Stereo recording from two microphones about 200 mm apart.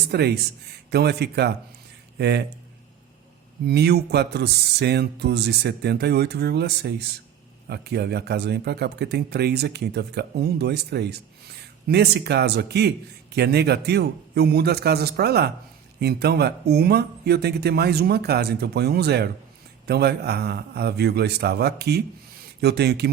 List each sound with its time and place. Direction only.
0.1 s speech: 55° right (ahead or behind)
3.7 s speech: 55° right (ahead or behind)